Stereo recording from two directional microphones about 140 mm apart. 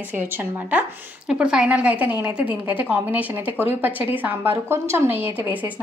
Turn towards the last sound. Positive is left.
turn(degrees=-15)  # may be behind; listen again after turning